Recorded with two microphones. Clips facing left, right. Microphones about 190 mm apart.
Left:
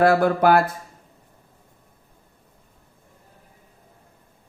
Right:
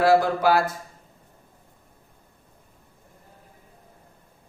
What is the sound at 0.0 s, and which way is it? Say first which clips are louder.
Speech: left 2 dB; 55° left (ahead or behind).